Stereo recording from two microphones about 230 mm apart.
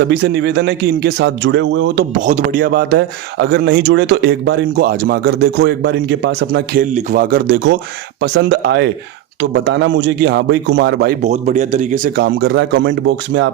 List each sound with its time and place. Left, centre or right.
0.1 s speech: right
2.1 s speech: right
6.9 s speech: right
11.2 s speech: right